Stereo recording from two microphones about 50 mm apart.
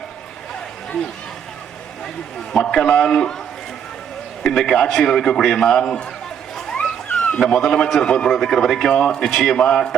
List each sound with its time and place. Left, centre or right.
1.0 s speech: centre
2.5 s a man's voice: centre
4.4 s a man's voice: centre
7.1 s a sound: left
7.3 s a man's voice: centre
8.3 s a man's voice: centre